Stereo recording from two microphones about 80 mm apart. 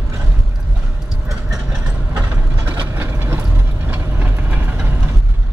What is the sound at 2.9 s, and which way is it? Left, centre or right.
Vehicle, right.